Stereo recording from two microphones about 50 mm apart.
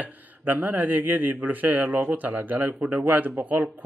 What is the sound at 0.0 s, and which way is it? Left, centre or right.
Speech, right.